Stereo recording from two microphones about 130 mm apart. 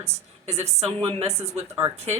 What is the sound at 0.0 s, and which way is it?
A woman's voice, 55° right (ahead or behind).